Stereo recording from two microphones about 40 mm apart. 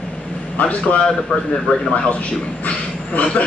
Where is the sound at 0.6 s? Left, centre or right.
Left.